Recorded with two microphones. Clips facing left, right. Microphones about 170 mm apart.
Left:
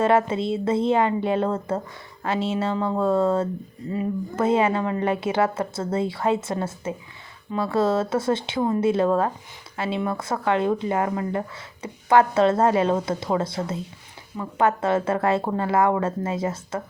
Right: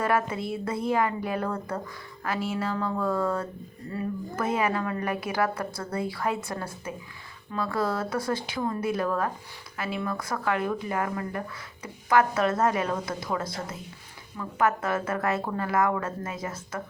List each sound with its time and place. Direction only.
0.0 s speech: 25° left (ahead or behind)